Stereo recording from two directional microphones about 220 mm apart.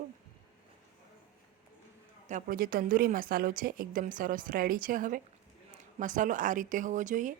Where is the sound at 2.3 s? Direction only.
35° right (ahead or behind).